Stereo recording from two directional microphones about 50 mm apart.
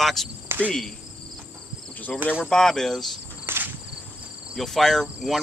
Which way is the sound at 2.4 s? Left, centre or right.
Centre.